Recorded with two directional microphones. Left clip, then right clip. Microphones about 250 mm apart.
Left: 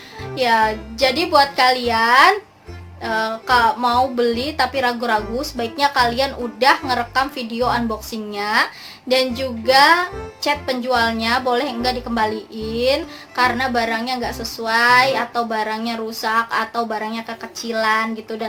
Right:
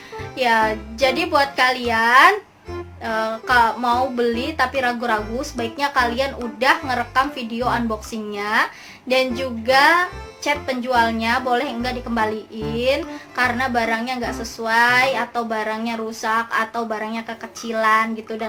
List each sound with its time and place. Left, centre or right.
0.3 s a woman's voice: centre